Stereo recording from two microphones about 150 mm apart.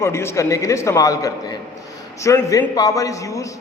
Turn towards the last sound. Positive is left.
turn(degrees=20)  # may be behind; listen again after turning